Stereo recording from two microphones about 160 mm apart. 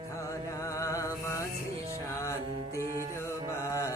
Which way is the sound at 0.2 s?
20° left (ahead or behind).